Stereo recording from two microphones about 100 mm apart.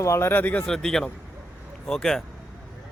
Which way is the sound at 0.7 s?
5° left (ahead or behind).